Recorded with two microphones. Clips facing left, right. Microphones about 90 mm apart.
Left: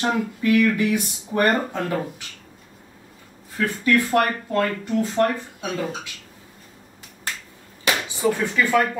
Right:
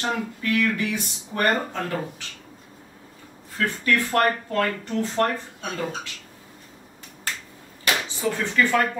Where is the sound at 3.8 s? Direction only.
10° left (ahead or behind).